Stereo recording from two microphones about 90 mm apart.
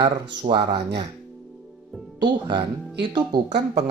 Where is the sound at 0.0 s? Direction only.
55° right (ahead or behind).